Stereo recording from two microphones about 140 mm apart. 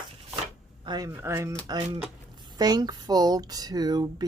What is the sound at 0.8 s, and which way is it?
Speech, 30° right (ahead or behind).